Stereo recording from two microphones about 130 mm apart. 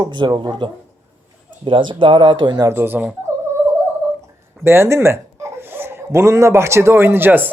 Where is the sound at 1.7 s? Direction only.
40° right (ahead or behind).